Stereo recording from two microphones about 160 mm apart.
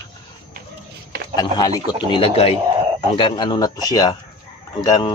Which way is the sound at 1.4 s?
25° left (ahead or behind).